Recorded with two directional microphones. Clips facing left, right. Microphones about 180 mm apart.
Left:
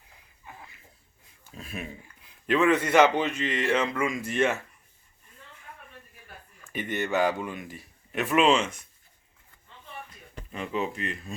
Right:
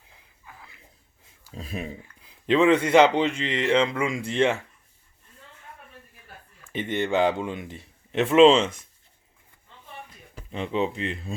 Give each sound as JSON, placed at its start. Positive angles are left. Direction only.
{"t": 0.5, "sound": "a sound", "side_deg": 20}
{"t": 1.5, "sound": "speech", "side_deg": -30}
{"t": 6.7, "sound": "speech", "side_deg": -20}
{"t": 10.5, "sound": "speech", "side_deg": -25}